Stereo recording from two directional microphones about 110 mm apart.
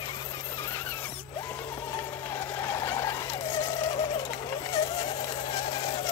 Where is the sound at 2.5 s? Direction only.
25° left (ahead or behind).